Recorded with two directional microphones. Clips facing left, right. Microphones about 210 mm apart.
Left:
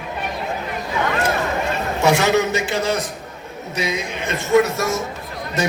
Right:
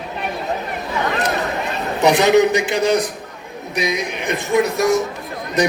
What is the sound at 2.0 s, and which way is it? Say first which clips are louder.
Speech: right 4 dB; 15° right (ahead or behind).